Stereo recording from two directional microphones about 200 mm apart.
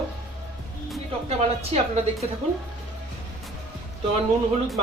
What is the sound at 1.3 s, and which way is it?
Speech, 30° right (ahead or behind).